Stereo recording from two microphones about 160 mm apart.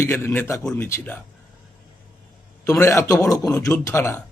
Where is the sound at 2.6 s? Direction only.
20° left (ahead or behind).